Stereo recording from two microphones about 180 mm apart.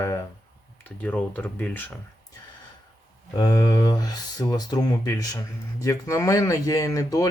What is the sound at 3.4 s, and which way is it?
Speech, 20° left (ahead or behind).